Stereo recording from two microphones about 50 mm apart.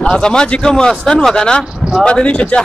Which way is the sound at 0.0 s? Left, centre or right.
Centre.